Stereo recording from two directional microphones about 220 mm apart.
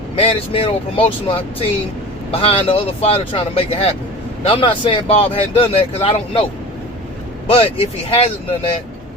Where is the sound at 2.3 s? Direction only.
25° left (ahead or behind).